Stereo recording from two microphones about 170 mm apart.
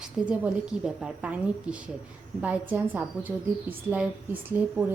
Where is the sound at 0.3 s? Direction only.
5° right (ahead or behind).